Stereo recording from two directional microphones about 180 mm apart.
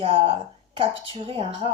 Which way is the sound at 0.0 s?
30° right (ahead or behind).